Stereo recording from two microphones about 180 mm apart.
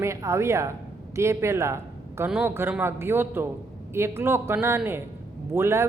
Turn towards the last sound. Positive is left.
turn(degrees=-15)  # may be behind; listen again after turning